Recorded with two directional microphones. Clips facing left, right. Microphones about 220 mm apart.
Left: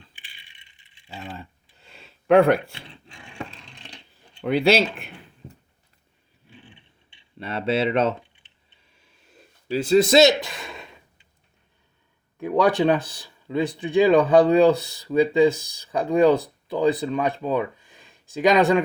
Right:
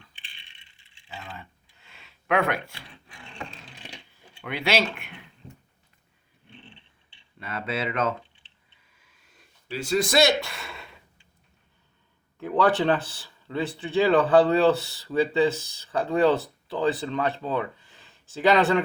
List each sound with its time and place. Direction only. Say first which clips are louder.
0.4 s rattle: left 1 dB; 15° left (ahead or behind)
1.2 s a sound: left 9 dB; 30° left (ahead or behind)
3.6 s a sound: right 1 dB; 5° right (ahead or behind)
4.4 s speech: left 7 dB; 30° left (ahead or behind)
6.5 s a sound: even; 10° left (ahead or behind)
7.3 s speech: left 7 dB; 30° left (ahead or behind)
9.6 s speech: left 8 dB; 35° left (ahead or behind)
10.0 s speech: left 5 dB; 25° left (ahead or behind)
12.4 s speech: left 3 dB; 15° left (ahead or behind)